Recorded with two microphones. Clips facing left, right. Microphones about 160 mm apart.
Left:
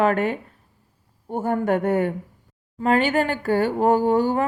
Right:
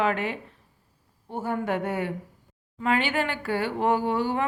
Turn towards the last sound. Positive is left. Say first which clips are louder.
# left 6 dB
turn(degrees=45)  # may be behind; listen again after turning